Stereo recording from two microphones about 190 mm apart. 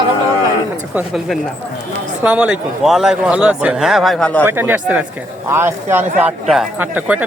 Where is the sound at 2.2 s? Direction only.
5° right (ahead or behind).